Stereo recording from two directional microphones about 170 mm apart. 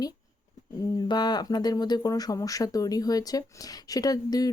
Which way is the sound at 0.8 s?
25° left (ahead or behind).